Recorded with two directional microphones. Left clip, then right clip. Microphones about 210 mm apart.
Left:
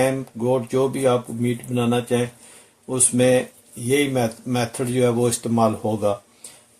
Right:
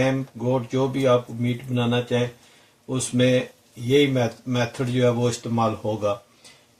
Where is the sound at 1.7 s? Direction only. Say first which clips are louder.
Left 2 dB; 40° left (ahead or behind).